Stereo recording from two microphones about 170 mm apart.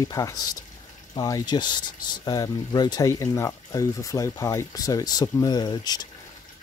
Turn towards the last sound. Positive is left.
turn(degrees=25)  # may be behind; listen again after turning